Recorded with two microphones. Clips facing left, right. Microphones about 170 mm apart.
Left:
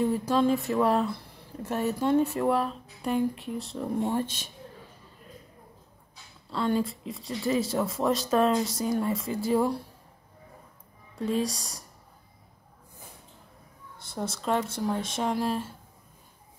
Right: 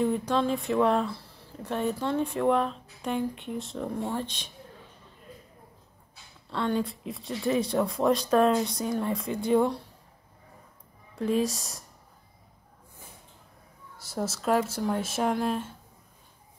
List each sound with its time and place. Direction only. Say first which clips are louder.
0.3 s speech: left 2 dB; 5° left (ahead or behind)
4.0 s speech: left 5 dB; 15° left (ahead or behind)
6.5 s speech: left 1 dB; centre (ahead or behind)
11.1 s speech: right 2 dB; centre (ahead or behind)
13.9 s speech: right 2 dB; 5° right (ahead or behind)